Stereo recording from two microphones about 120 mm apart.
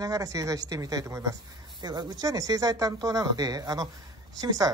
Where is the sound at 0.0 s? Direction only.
30° right (ahead or behind).